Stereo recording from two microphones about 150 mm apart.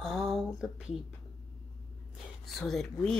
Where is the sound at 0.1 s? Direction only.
Centre (ahead or behind).